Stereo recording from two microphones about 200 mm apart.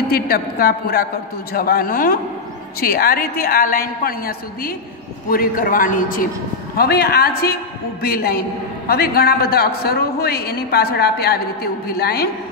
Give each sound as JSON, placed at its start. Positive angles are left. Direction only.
{"t": 0.1, "sound": "a man's voice", "side_deg": 50}